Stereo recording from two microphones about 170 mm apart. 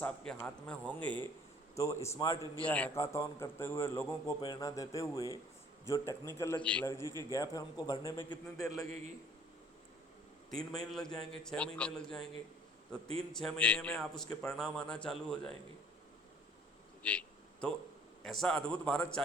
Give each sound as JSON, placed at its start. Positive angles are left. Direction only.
{"t": 0.0, "sound": "a man's voice", "side_deg": 5}
{"t": 2.6, "sound": "a man's voice", "side_deg": 10}
{"t": 4.4, "sound": "a man's voice", "side_deg": 25}
{"t": 7.1, "sound": "a man's voice", "side_deg": -20}
{"t": 7.3, "sound": "speech", "side_deg": 20}
{"t": 10.5, "sound": "a man's voice", "side_deg": 0}
{"t": 13.3, "sound": "a man's voice", "side_deg": 5}
{"t": 17.0, "sound": "a sound", "side_deg": 5}
{"t": 18.2, "sound": "a man's voice", "side_deg": 5}